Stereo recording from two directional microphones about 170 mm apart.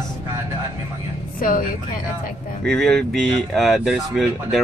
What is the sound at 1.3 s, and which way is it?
Speech, 55° left (ahead or behind).